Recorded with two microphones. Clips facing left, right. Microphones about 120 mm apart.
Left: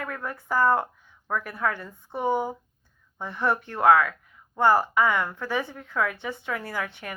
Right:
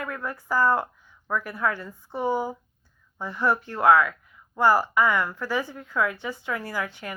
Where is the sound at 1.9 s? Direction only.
20° left (ahead or behind).